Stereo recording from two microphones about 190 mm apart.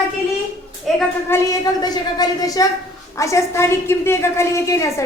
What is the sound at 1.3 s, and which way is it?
A woman's voice, 20° left (ahead or behind).